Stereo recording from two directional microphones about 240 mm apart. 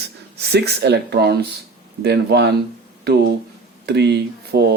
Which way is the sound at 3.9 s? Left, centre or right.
Right.